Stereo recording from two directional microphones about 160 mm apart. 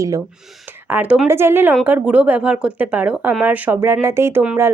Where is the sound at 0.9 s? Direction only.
10° right (ahead or behind).